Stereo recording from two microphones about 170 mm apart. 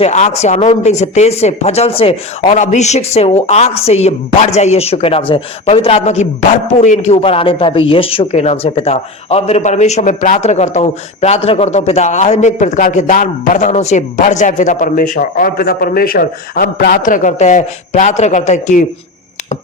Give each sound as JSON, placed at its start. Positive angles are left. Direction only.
{"t": 0.0, "sound": "a woman's voice", "side_deg": 40}
{"t": 2.5, "sound": "a woman's voice", "side_deg": 45}